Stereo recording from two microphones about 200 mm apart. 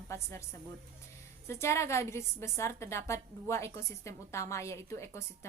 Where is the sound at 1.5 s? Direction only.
15° left (ahead or behind).